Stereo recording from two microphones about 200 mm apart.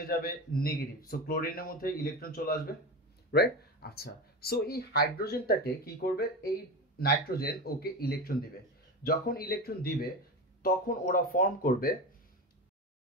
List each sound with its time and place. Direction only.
0.0 s speech: 45° left (ahead or behind)